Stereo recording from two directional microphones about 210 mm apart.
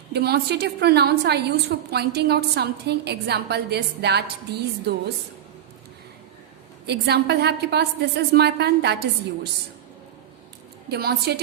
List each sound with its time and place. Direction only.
0.1 s a woman's voice: 50° right (ahead or behind)
6.8 s a woman's voice: 50° right (ahead or behind)
10.8 s a woman's voice: 50° right (ahead or behind)